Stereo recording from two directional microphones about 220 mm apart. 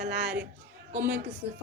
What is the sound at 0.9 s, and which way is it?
Speech, 10° right (ahead or behind).